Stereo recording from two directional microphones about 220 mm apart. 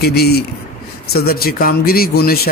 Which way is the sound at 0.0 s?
45° left (ahead or behind).